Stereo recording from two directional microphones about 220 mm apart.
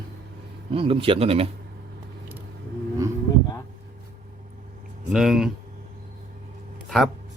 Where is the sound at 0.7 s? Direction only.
25° right (ahead or behind).